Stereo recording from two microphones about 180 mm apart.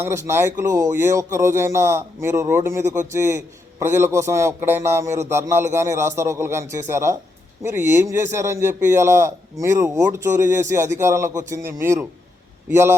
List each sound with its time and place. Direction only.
0.0 s a man's voice: 15° right (ahead or behind)
2.8 s speech: 45° right (ahead or behind)
3.8 s a man's voice: 15° right (ahead or behind)